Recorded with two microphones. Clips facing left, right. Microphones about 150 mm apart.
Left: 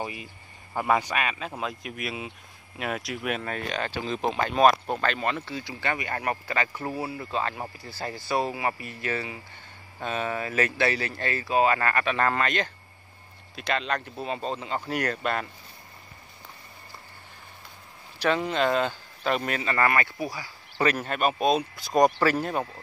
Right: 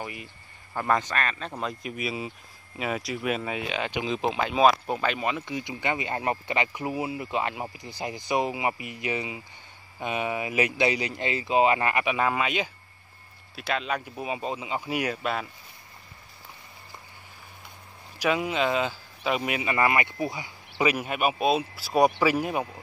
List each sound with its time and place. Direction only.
0.0 s speech: 20° left (ahead or behind); by 15.5 s centre (ahead or behind)
18.2 s speech: 10° right (ahead or behind)
20.8 s speech: 10° right (ahead or behind)